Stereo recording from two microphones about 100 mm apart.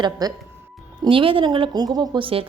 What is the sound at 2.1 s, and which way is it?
Speech, 60° right (ahead or behind).